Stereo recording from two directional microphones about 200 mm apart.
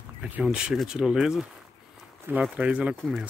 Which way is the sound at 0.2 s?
5° right (ahead or behind).